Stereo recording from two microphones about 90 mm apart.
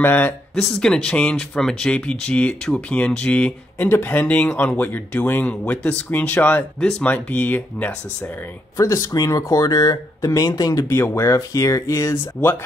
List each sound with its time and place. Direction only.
0.0 s speech: 20° left (ahead or behind)
0.6 s speech: 5° left (ahead or behind)
8.7 s speech: 35° left (ahead or behind)
10.9 s speech: 30° left (ahead or behind)
12.4 s speech: 20° left (ahead or behind)